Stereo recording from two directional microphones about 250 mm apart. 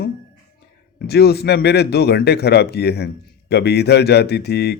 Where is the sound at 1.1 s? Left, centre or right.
Left.